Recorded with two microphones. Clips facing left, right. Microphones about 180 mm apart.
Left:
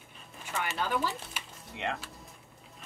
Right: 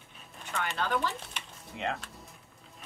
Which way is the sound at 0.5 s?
5° left (ahead or behind).